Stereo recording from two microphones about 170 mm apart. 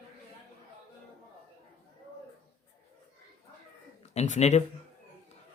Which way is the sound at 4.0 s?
40° left (ahead or behind).